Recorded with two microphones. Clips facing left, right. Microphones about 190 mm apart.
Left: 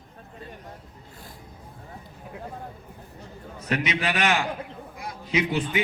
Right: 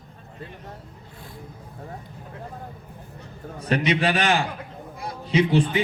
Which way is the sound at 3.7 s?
35° right (ahead or behind).